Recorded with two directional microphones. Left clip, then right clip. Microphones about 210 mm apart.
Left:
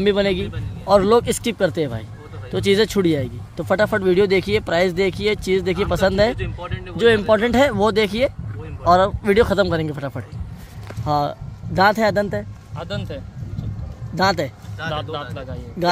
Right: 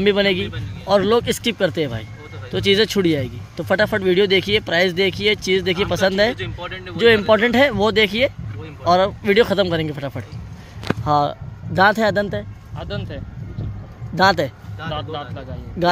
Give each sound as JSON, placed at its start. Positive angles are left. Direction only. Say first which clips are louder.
{"t": 0.0, "sound": "speech", "louder": "right 1 dB", "side_deg": -5}
{"t": 0.8, "sound": "speech", "louder": "left 2 dB", "side_deg": 10}
{"t": 6.3, "sound": "speech", "louder": "right 2 dB", "side_deg": -5}
{"t": 12.7, "sound": "speech", "louder": "left 1 dB", "side_deg": 40}
{"t": 14.1, "sound": "speech", "louder": "right 3 dB", "side_deg": -5}
{"t": 14.9, "sound": "speech", "louder": "left 1 dB", "side_deg": 40}